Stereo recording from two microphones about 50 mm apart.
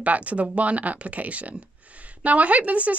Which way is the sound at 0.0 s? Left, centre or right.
Right.